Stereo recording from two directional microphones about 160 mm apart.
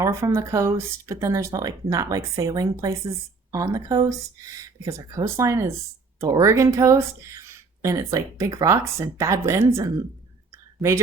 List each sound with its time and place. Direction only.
0.0 s speech: 15° right (ahead or behind)